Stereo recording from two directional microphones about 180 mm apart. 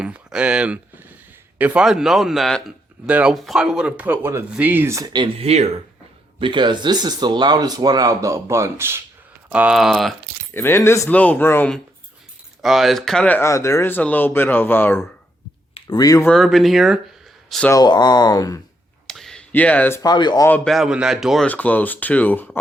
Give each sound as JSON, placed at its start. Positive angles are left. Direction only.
{"t": 0.0, "sound": "speech", "side_deg": -5}
{"t": 6.4, "sound": "speech", "side_deg": -25}
{"t": 10.5, "sound": "speech", "side_deg": 10}
{"t": 12.6, "sound": "speech", "side_deg": 0}
{"t": 15.7, "sound": "speech", "side_deg": 25}
{"t": 16.3, "sound": "speech", "side_deg": 0}
{"t": 17.7, "sound": "speech", "side_deg": 20}
{"t": 19.0, "sound": "speech", "side_deg": 0}
{"t": 20.5, "sound": "speech", "side_deg": 0}